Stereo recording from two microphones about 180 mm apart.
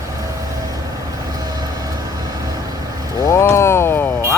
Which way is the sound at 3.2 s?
15° left (ahead or behind).